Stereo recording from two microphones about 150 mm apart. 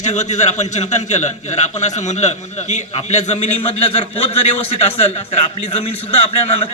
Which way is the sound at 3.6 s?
40° left (ahead or behind).